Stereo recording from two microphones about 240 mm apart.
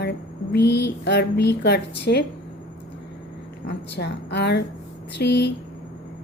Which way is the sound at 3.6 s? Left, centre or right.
Left.